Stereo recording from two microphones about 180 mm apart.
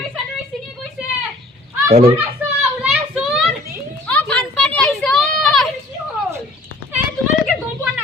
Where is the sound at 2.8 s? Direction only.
5° right (ahead or behind).